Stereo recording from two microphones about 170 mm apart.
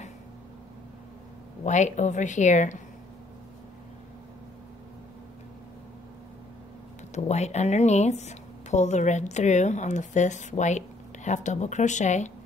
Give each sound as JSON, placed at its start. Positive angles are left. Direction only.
{"t": 1.6, "sound": "a woman's voice", "side_deg": 45}
{"t": 7.2, "sound": "a woman's voice", "side_deg": 40}